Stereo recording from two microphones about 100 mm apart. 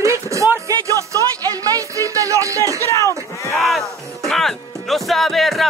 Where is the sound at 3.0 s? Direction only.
30° left (ahead or behind).